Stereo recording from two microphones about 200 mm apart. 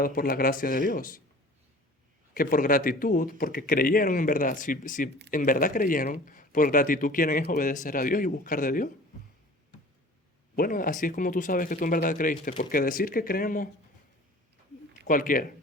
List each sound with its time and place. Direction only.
0.0 s speech: 45° left (ahead or behind)
2.3 s speech: 45° left (ahead or behind)
10.5 s speech: 45° left (ahead or behind)
15.0 s speech: 40° left (ahead or behind)